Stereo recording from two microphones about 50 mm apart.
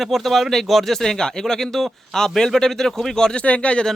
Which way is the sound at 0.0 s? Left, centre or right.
Centre.